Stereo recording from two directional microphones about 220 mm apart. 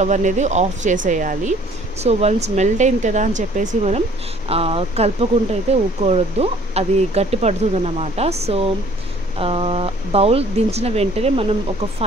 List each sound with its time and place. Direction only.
0.0 s speech: 35° right (ahead or behind)